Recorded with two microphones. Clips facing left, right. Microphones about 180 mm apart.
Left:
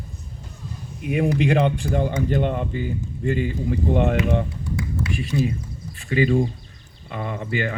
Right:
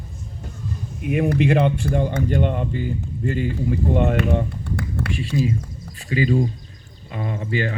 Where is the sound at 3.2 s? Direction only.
45° right (ahead or behind).